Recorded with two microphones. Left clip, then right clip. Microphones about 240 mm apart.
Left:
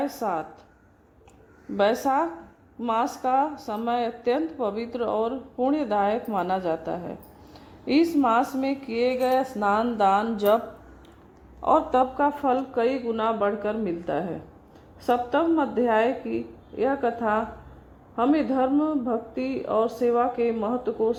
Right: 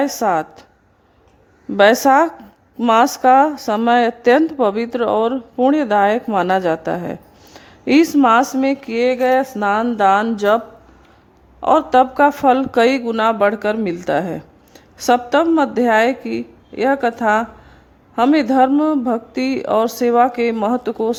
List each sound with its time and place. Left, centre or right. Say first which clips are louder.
0.0 s a woman's voice: right 11 dB; right
1.7 s a woman's voice: right 11 dB; right
11.6 s a woman's voice: right 8 dB; right